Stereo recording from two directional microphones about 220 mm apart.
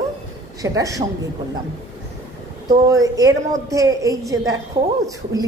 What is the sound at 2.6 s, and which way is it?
A woman's voice, 15° right (ahead or behind).